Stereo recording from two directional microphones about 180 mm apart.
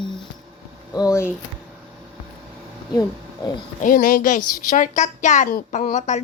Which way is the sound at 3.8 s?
50° left (ahead or behind).